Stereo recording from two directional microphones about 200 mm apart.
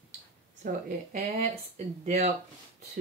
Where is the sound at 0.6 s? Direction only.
40° right (ahead or behind).